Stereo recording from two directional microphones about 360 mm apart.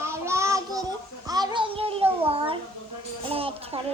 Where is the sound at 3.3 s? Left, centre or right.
Centre.